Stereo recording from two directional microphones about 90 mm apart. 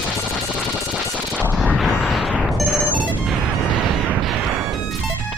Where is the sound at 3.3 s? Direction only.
Centre (ahead or behind).